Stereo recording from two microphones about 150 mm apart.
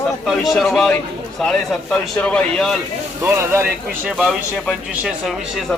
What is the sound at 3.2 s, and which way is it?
Speech, 15° right (ahead or behind).